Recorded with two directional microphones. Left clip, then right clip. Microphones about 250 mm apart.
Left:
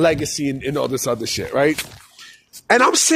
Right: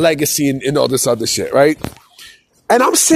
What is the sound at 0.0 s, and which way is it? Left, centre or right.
Speech, right.